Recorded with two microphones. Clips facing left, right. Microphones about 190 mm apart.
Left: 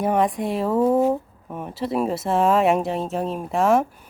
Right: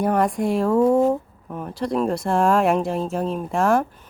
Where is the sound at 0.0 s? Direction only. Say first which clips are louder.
Right 1 dB; centre (ahead or behind).